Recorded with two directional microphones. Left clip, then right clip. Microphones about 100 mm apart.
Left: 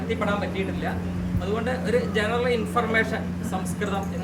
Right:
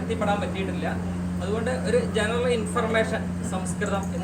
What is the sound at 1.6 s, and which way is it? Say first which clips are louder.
Speech: right 1 dB; 20° left (ahead or behind).